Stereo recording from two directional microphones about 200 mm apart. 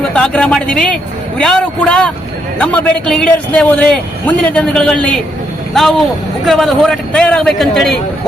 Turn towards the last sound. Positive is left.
turn(degrees=0)  # may be behind; listen again after turning